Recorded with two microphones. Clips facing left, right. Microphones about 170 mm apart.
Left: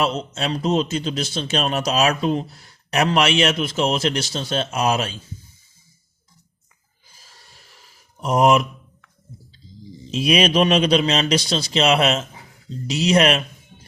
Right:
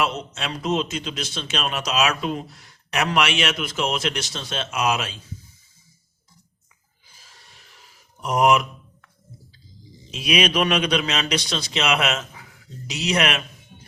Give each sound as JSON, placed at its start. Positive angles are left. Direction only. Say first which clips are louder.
{"t": 0.0, "sound": "a man's voice", "louder": "left 3 dB", "side_deg": 30}
{"t": 8.2, "sound": "speech", "louder": "left 2 dB", "side_deg": 30}
{"t": 10.1, "sound": "a man's voice", "louder": "left 4 dB", "side_deg": 30}